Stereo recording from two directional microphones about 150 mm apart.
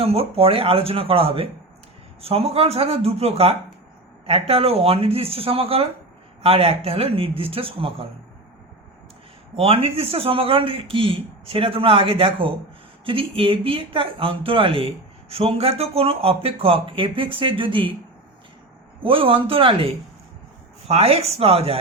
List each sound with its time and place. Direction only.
0.0 s speech: 40° right (ahead or behind)
9.6 s speech: 40° right (ahead or behind)
19.0 s speech: 35° right (ahead or behind)